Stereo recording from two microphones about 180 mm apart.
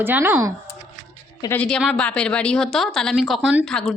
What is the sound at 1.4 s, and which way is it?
A woman's voice, 10° left (ahead or behind).